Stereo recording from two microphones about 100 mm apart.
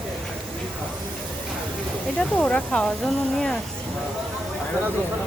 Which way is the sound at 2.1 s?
10° left (ahead or behind).